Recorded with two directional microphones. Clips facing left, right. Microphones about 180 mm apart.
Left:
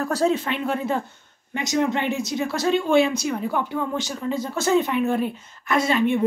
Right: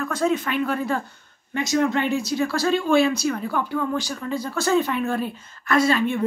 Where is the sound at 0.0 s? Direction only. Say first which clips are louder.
Left 1 dB; 35° left (ahead or behind).